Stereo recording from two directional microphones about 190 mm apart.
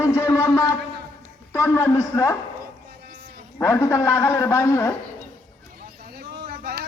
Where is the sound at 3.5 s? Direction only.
15° left (ahead or behind).